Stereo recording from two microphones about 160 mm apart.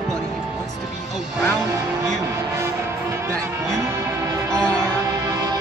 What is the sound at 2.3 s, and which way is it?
Music, 15° right (ahead or behind).